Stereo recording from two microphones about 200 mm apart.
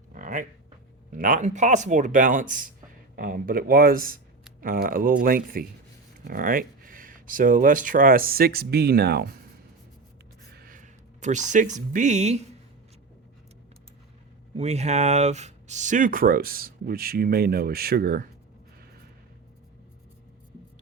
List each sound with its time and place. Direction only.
0.1 s a sound: 40° right (ahead or behind)
1.1 s speech: 40° right (ahead or behind)
10.5 s speech: 45° right (ahead or behind)
14.5 s speech: 35° right (ahead or behind); by 18.3 s 50° right (ahead or behind)